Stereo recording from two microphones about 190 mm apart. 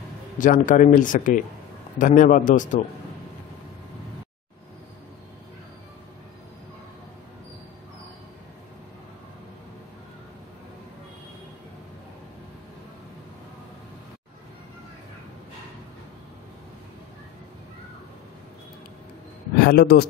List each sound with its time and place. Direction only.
0.4 s speech: 45° left (ahead or behind)
19.6 s a man's voice: 55° left (ahead or behind)